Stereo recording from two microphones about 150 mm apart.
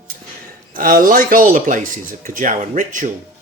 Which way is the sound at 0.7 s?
65° right (ahead or behind).